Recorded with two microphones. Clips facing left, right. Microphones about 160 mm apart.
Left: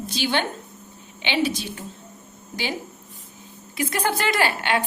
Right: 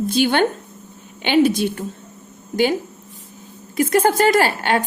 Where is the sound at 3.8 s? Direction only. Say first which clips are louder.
Right 9 dB; 45° right (ahead or behind).